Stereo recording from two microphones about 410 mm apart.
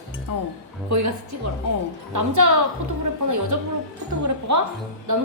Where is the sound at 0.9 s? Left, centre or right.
Right.